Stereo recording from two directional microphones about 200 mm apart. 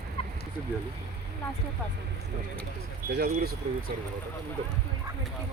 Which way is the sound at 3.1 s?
55° right (ahead or behind).